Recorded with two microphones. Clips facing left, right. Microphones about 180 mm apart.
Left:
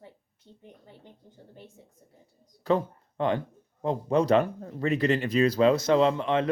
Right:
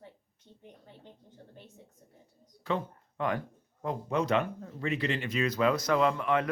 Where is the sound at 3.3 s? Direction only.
25° left (ahead or behind).